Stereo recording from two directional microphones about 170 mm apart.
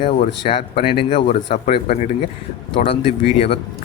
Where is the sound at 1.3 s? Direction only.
50° left (ahead or behind).